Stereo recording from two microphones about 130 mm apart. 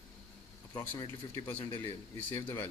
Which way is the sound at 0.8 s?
15° left (ahead or behind).